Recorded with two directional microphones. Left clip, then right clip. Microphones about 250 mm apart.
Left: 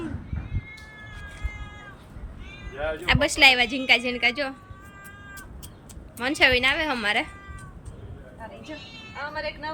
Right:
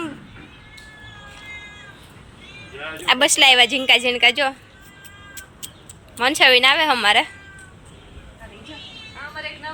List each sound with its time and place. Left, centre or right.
3.1 s a woman's voice: centre
5.3 s crow: left
6.1 s a woman's voice: centre